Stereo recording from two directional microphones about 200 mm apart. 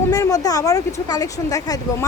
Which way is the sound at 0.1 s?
15° left (ahead or behind).